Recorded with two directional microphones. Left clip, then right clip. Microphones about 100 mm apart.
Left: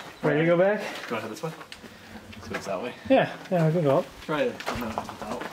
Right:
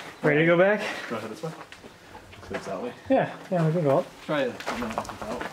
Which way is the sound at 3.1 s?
25° left (ahead or behind).